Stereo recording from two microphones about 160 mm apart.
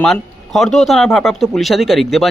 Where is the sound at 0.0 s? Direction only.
Centre (ahead or behind).